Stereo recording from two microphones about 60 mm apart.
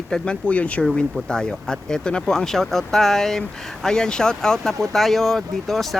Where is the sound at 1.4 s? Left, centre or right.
Centre.